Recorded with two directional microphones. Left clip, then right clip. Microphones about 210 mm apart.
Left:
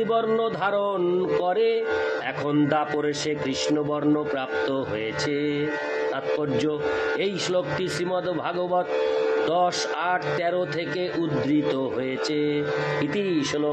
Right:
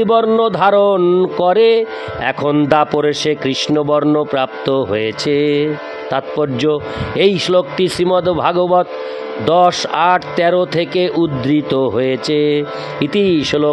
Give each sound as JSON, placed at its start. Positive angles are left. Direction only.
{"t": 0.0, "sound": "mantra", "side_deg": -45}